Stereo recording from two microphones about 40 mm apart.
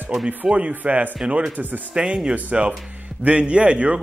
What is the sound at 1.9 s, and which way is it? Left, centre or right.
A man's voice, right.